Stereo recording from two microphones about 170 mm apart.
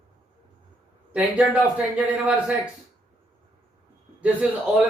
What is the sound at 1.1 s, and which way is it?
Speech, 5° right (ahead or behind).